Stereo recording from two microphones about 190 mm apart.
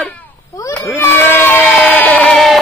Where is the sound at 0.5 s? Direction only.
15° left (ahead or behind).